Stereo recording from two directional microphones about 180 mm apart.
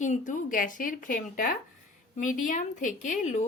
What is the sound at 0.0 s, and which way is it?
A woman's voice, 45° left (ahead or behind).